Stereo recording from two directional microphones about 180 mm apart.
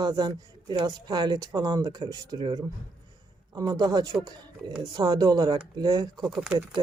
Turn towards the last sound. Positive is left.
turn(degrees=-5)  # may be behind; listen again after turning